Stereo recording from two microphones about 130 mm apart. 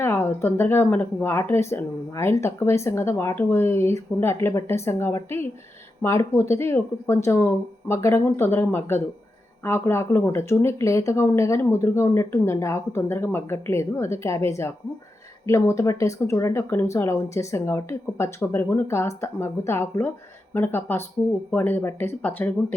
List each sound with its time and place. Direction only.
0.0 s speech: 20° left (ahead or behind)